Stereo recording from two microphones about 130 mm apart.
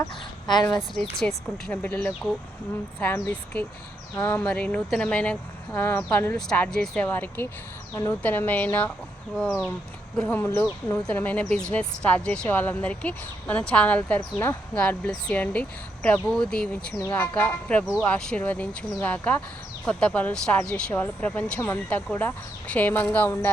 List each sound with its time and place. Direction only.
0.0 s a sound: 30° left (ahead or behind)
1.1 s speech: centre (ahead or behind); by 4.4 s 20° left (ahead or behind)
4.4 s speech: 10° left (ahead or behind)
10.2 s speech: 15° left (ahead or behind)